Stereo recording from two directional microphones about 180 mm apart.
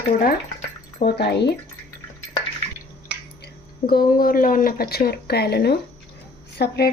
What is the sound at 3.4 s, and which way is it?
Speech, 55° left (ahead or behind).